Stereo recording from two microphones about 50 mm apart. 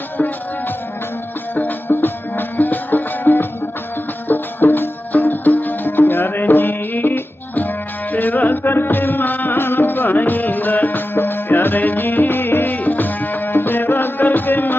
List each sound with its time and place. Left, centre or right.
1.5 s music: left